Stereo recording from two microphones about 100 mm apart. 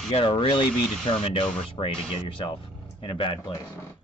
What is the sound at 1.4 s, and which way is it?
Speech, 60° left (ahead or behind).